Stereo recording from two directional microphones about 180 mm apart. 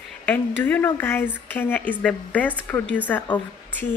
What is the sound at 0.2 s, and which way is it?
Speech, 10° left (ahead or behind).